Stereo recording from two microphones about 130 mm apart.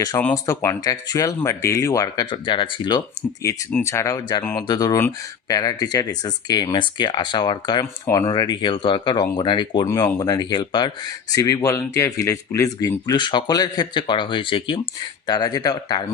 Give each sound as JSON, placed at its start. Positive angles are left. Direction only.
{"t": 0.4, "sound": "speech", "side_deg": 20}
{"t": 3.4, "sound": "speech", "side_deg": 25}
{"t": 13.1, "sound": "speech", "side_deg": 35}